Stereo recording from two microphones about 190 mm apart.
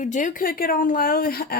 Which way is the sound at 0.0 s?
40° left (ahead or behind).